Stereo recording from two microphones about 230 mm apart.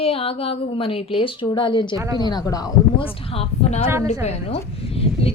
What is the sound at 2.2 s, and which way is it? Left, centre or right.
Speech, centre.